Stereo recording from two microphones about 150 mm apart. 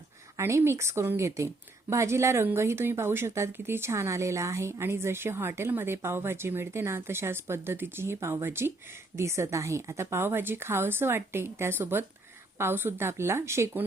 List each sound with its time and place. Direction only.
0.3 s speech: 20° right (ahead or behind)